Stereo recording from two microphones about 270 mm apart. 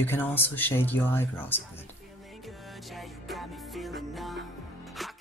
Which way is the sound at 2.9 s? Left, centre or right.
Centre.